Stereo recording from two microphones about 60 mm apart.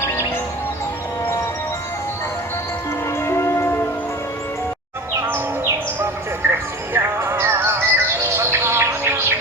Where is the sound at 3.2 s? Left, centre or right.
Left.